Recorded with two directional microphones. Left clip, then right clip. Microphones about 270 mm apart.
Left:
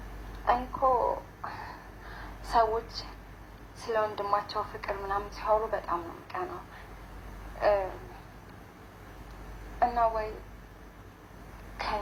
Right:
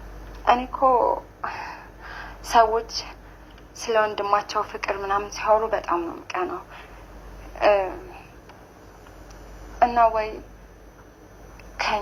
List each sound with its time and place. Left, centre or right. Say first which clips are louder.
0.4 s a woman's voice: right 7 dB; right
3.8 s speech: right 8 dB; right
7.6 s speech: right 7 dB; right
9.8 s speech: right 8 dB; right